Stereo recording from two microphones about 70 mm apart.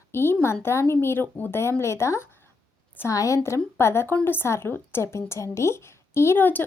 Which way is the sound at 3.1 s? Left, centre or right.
Left.